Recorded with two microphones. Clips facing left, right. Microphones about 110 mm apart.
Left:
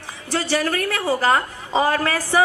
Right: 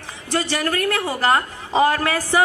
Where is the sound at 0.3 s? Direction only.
20° right (ahead or behind).